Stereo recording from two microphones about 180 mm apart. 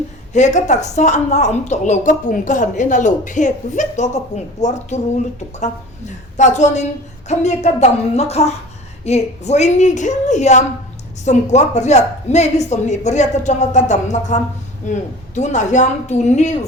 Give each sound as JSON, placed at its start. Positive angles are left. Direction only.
{"t": 0.3, "sound": "a woman's voice", "side_deg": 40}